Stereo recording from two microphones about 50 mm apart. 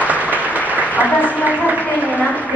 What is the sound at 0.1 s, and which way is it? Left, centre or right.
Applause, right.